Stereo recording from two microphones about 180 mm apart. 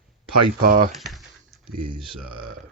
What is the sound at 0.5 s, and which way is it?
Speech, 50° right (ahead or behind).